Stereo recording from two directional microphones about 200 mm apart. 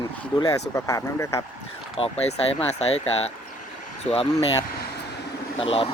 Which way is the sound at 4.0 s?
30° left (ahead or behind).